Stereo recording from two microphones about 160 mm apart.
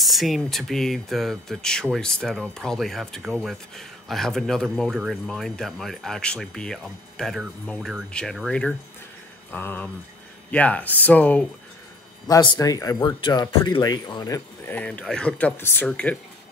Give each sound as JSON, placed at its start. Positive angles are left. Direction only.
{"t": 0.0, "sound": "speech", "side_deg": 0}
{"t": 12.3, "sound": "speech", "side_deg": 25}